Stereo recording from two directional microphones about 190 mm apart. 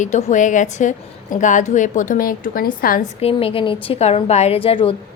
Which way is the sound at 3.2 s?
30° left (ahead or behind).